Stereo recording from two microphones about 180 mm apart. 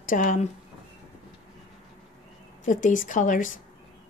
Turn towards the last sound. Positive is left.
turn(degrees=45)  # may be behind; listen again after turning